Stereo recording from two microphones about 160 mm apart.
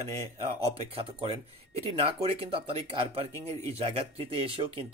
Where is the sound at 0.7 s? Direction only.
35° right (ahead or behind).